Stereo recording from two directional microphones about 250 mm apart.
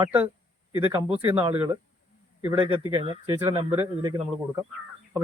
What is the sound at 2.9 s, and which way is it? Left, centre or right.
A man's voice, centre.